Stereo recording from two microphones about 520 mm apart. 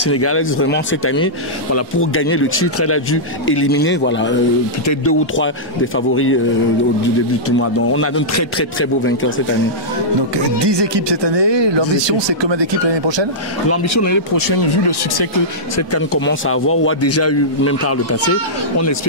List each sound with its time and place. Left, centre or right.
0.0 s a man's voice: left
7.4 s a man's voice: left
10.3 s speech: right
13.7 s speech: left
15.7 s a man's voice: left